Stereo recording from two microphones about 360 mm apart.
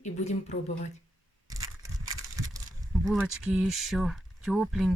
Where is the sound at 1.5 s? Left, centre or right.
Centre.